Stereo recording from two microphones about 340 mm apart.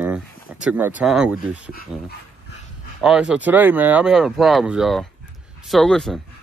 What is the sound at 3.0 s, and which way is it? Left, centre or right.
Speech, centre.